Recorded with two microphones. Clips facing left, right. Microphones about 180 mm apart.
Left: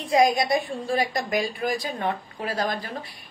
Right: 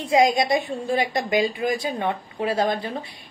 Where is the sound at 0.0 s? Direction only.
25° right (ahead or behind).